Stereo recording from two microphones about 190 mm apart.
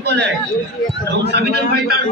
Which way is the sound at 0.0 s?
65° right (ahead or behind).